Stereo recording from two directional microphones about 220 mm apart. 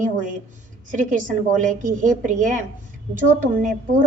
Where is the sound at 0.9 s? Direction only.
35° right (ahead or behind).